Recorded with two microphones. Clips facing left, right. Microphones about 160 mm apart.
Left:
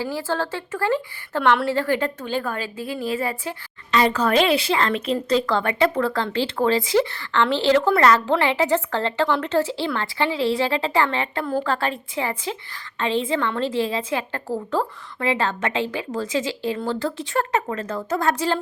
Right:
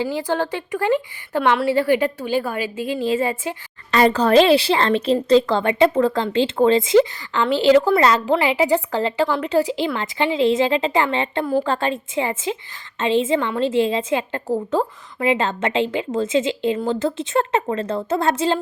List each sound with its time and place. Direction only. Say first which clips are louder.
0.0 s speech: right 3 dB; 20° right (ahead or behind)
1.4 s a woman's voice: right 2 dB; 5° right (ahead or behind); by 3.5 s 20° right (ahead or behind)
4.1 s a woman's voice: right 5 dB; 30° right (ahead or behind)